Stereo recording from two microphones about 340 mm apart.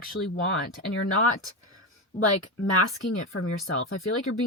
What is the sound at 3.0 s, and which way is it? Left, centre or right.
Speech, left.